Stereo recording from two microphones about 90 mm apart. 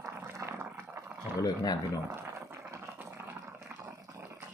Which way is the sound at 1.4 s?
45° left (ahead or behind).